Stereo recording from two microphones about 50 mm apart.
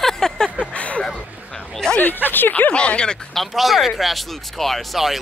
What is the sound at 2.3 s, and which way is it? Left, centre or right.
Speech, left.